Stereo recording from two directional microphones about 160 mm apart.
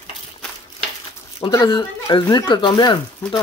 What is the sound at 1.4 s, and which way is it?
Speech, 25° left (ahead or behind).